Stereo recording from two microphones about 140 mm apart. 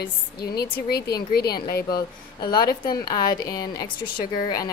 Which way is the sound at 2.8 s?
30° left (ahead or behind).